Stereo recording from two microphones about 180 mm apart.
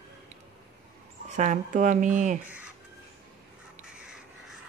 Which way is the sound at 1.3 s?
40° right (ahead or behind).